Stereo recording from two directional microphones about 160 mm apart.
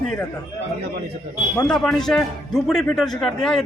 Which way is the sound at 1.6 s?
5° left (ahead or behind).